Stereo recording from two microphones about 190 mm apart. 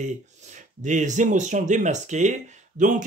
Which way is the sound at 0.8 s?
40° right (ahead or behind).